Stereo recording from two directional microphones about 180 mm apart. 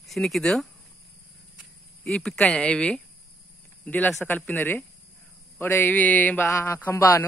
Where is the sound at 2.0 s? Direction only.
5° left (ahead or behind).